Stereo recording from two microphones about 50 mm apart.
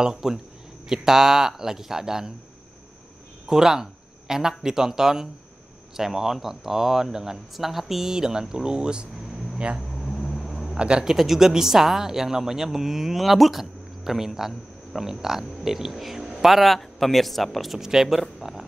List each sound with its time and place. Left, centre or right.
0.0 s speech: centre
3.4 s speech: centre
9.8 s vehicle: centre
10.7 s speech: centre
11.1 s speech: centre